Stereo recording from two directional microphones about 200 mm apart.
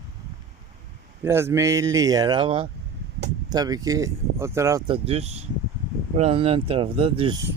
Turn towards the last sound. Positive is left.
turn(degrees=-20)  # may be behind; listen again after turning